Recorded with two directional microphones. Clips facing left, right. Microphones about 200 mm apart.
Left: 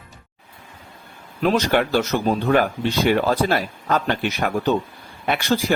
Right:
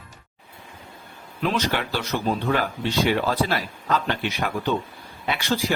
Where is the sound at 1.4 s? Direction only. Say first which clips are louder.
Left 6 dB; 45° left (ahead or behind).